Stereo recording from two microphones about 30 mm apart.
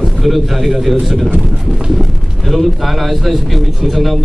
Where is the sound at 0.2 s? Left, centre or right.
Centre.